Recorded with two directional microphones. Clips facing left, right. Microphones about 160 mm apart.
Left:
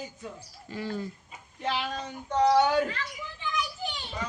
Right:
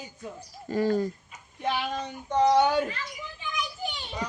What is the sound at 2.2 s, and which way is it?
Speech, 15° right (ahead or behind).